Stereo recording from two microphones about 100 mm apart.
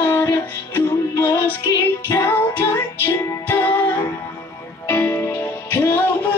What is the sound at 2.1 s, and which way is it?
Music, 25° left (ahead or behind).